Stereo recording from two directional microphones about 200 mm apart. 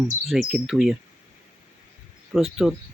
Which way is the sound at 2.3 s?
Centre (ahead or behind).